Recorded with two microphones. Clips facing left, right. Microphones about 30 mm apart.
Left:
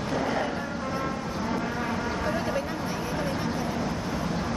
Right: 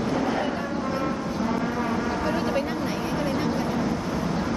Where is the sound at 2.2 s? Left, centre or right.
Centre.